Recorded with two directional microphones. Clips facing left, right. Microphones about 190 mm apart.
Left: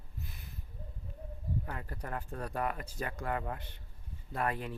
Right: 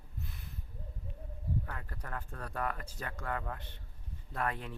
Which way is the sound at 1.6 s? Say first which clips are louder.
Left 4 dB; 20° left (ahead or behind).